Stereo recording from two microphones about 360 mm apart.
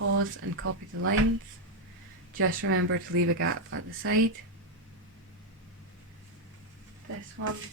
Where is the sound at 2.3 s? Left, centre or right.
Right.